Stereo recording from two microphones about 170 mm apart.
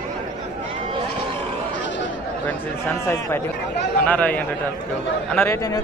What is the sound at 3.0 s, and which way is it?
A man's voice, 15° left (ahead or behind).